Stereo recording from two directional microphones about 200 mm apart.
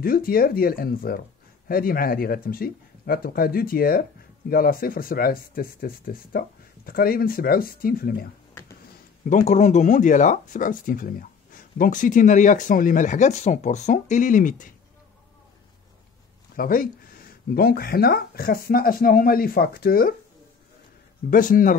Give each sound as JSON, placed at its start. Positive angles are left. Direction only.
{"t": 0.0, "sound": "speech", "side_deg": 45}
{"t": 9.3, "sound": "speech", "side_deg": 35}
{"t": 16.5, "sound": "speech", "side_deg": 45}
{"t": 21.3, "sound": "speech", "side_deg": 40}